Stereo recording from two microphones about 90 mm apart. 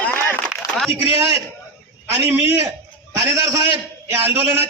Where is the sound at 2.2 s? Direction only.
30° right (ahead or behind).